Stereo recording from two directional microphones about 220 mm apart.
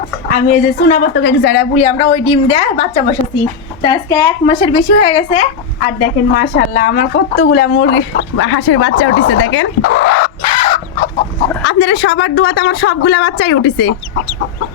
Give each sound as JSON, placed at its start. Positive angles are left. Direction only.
{"t": 0.3, "sound": "speech", "side_deg": 35}
{"t": 1.1, "sound": "speech", "side_deg": 50}
{"t": 1.7, "sound": "a woman's voice", "side_deg": 25}
{"t": 3.8, "sound": "a woman's voice", "side_deg": 15}
{"t": 6.3, "sound": "speech", "side_deg": 40}
{"t": 7.4, "sound": "speech", "side_deg": 50}
{"t": 10.4, "sound": "chicken", "side_deg": 25}
{"t": 11.6, "sound": "speech", "side_deg": 50}